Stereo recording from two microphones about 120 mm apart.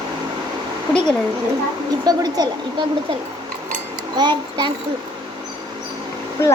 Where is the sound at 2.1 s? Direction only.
35° right (ahead or behind).